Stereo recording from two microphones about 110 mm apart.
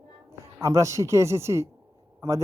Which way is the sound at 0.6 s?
25° right (ahead or behind).